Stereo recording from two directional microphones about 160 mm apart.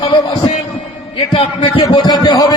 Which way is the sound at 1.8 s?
25° left (ahead or behind).